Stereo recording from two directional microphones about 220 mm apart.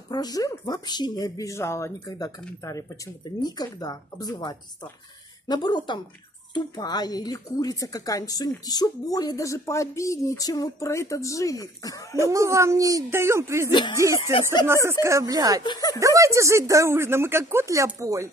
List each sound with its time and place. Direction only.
0.1 s a woman's voice: 15° left (ahead or behind)
12.3 s speech: 15° right (ahead or behind)
13.7 s speech: 20° left (ahead or behind)
14.9 s speech: 10° right (ahead or behind)
15.6 s a woman's voice: 20° left (ahead or behind)
16.0 s speech: 15° right (ahead or behind)